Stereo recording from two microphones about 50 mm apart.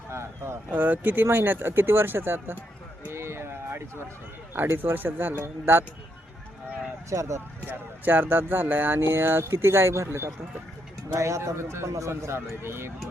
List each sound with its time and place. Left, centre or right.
0.1 s speech: right
0.7 s speech: right
3.1 s a sound: right
4.5 s speech: right
7.1 s speech: right
7.7 s a man's voice: right